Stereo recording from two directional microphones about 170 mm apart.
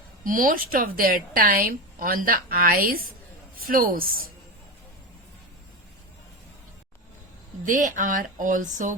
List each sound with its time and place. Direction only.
0.3 s a woman's voice: 55° right (ahead or behind)
7.6 s speech: 50° right (ahead or behind)